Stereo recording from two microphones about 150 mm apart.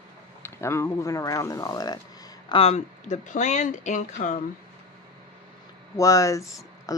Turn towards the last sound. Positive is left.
turn(degrees=20)  # may be behind; listen again after turning